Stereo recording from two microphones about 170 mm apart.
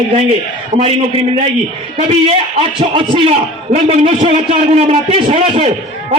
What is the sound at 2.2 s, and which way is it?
A man's voice, 35° right (ahead or behind).